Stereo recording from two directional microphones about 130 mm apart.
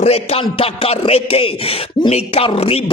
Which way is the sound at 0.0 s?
55° left (ahead or behind).